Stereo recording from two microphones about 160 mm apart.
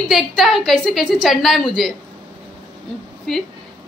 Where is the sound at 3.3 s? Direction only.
Centre (ahead or behind).